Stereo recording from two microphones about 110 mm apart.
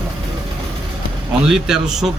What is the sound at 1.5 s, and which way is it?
Speech, 5° right (ahead or behind).